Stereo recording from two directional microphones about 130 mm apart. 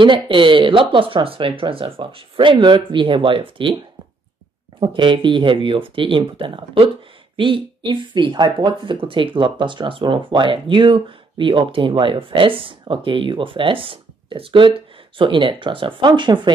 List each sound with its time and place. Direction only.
0.0 s speech: 40° right (ahead or behind)
4.7 s speech: 40° right (ahead or behind)